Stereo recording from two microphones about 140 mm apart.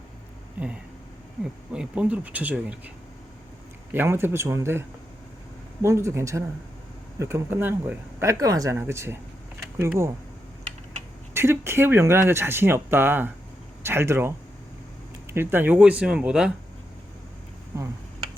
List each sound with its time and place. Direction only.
0.6 s a sound: 10° right (ahead or behind)
1.7 s speech: 10° right (ahead or behind)
3.9 s speech: 15° right (ahead or behind)
11.3 s speech: 15° right (ahead or behind)